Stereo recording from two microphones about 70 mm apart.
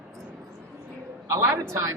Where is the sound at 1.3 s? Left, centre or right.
Right.